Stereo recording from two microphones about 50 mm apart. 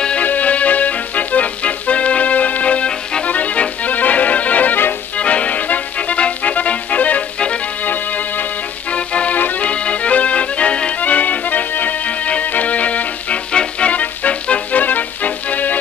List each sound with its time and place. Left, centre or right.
0.2 s music: left
3.3 s accordion: left
5.1 s music: left
7.8 s music: left
9.4 s accordion: left
9.7 s accordion: left
11.0 s music: left